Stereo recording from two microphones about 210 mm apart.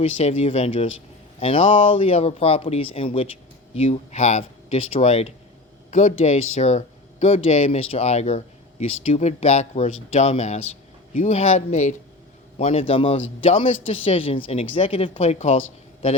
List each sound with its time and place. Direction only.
0.0 s speech: 30° left (ahead or behind)